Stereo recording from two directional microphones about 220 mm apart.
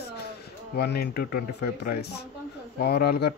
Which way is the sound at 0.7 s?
45° left (ahead or behind).